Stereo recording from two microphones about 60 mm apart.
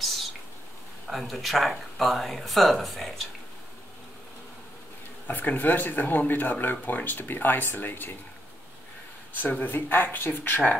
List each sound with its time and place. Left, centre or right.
1.0 s speech: centre
5.2 s speech: left
9.3 s speech: left